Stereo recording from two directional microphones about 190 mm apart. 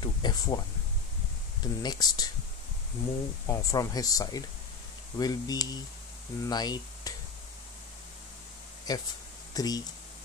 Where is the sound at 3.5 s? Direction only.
20° left (ahead or behind).